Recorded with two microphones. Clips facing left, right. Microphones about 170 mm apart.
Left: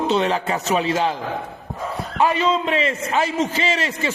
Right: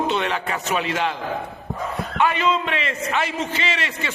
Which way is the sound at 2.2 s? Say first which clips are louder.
Left 2 dB; 35° left (ahead or behind).